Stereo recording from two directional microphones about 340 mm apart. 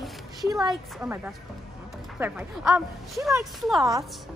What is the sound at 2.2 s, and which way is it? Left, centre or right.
Speech, centre.